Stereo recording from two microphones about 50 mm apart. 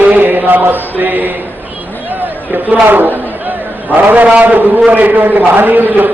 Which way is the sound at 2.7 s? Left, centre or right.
Right.